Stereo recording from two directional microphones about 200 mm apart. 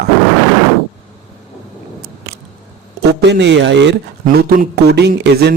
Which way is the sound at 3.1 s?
60° right (ahead or behind).